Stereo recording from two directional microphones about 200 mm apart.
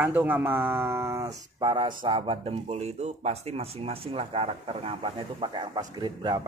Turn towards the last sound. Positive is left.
turn(degrees=-20)  # may be behind; listen again after turning